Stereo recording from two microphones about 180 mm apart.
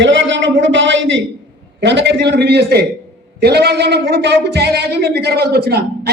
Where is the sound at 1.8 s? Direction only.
70° right (ahead or behind).